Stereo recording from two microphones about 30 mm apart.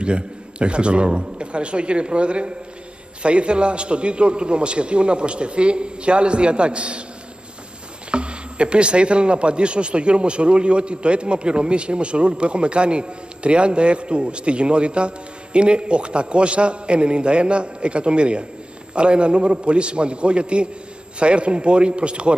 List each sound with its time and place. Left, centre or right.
0.0 s speech: right
8.1 s speech: right